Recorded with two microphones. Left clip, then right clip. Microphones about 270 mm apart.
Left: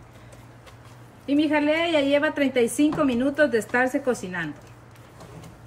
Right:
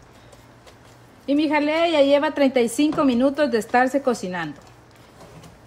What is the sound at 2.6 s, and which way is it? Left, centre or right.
Speech, centre.